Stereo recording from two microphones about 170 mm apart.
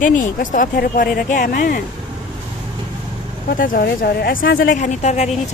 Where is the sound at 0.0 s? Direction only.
50° left (ahead or behind).